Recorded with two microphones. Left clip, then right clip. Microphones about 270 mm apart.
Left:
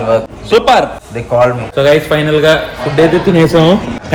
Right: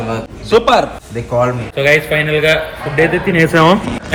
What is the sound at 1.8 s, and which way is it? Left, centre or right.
Speech, centre.